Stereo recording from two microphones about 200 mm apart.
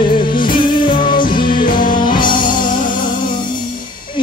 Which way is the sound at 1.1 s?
45° left (ahead or behind).